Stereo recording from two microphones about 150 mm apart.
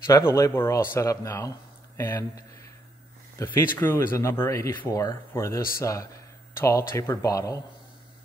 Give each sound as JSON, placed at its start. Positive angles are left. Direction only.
{"t": 0.0, "sound": "speech", "side_deg": 15}